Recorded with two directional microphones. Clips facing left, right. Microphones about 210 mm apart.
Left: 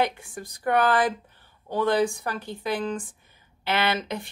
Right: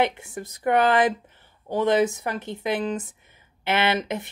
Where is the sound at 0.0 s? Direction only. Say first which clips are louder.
Right 2 dB; 20° right (ahead or behind).